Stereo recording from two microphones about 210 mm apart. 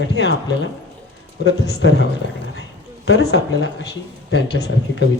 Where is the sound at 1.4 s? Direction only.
55° left (ahead or behind).